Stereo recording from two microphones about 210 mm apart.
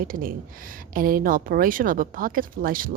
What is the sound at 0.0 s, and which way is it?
A woman's voice, 40° right (ahead or behind).